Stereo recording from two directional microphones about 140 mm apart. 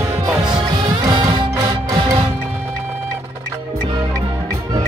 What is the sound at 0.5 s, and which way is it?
Music, 30° right (ahead or behind).